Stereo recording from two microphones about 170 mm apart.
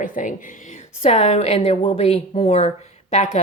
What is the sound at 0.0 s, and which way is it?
A woman's voice, 50° left (ahead or behind).